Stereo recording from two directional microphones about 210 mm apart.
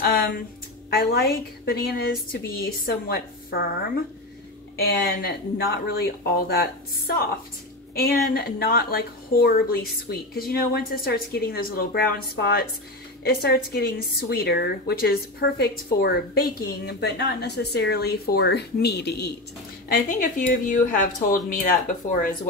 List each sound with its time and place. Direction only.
0.8 s a woman's voice: 45° left (ahead or behind)
5.0 s a woman's voice: 45° left (ahead or behind)
7.9 s a woman's voice: 45° left (ahead or behind)